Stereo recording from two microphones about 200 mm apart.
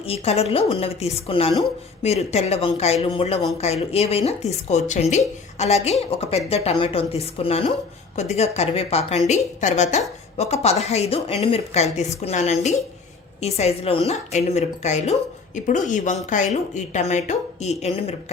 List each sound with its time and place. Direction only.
0.0 s a woman's voice: 30° left (ahead or behind)